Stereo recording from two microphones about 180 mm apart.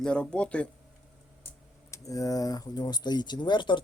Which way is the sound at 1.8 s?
20° left (ahead or behind).